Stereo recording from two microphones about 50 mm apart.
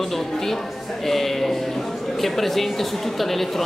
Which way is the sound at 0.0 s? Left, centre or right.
Centre.